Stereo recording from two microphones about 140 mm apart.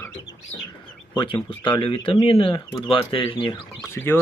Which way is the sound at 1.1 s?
35° left (ahead or behind).